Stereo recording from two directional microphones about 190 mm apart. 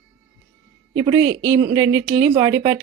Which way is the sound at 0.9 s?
20° right (ahead or behind).